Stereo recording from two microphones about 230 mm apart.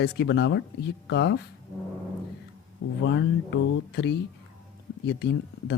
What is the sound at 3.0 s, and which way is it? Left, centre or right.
Speech, left.